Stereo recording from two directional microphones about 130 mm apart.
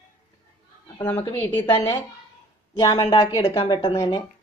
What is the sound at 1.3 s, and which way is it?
Speech, 15° left (ahead or behind).